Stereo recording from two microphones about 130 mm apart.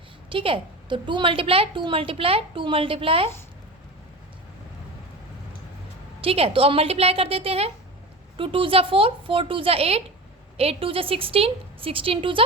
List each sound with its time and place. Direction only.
0.3 s a woman's voice: 45° right (ahead or behind)
6.2 s a woman's voice: 45° right (ahead or behind)